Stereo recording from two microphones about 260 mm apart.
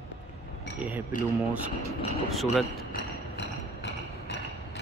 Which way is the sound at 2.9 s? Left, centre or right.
Left.